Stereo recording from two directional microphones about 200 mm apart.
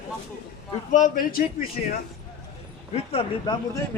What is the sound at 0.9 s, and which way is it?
Speech, 40° left (ahead or behind).